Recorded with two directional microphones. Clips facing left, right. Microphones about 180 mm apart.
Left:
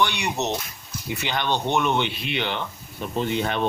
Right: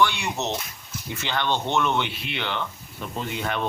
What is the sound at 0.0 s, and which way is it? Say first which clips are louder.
Speech: even; 20° left (ahead or behind).